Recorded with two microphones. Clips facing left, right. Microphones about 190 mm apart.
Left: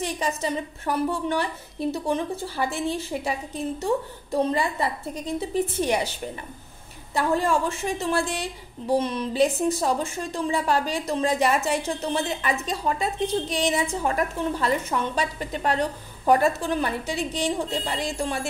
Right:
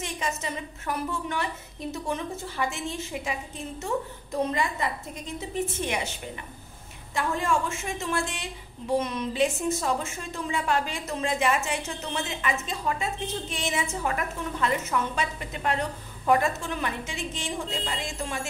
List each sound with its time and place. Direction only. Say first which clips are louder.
0.0 s a woman's voice: left 5 dB; 35° left (ahead or behind)
7.2 s a woman's voice: left 4 dB; 35° left (ahead or behind)